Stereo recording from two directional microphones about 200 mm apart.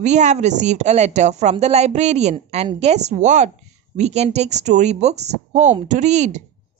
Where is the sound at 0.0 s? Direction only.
35° right (ahead or behind).